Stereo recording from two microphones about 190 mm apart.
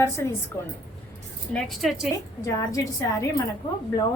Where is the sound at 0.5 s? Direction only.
10° left (ahead or behind).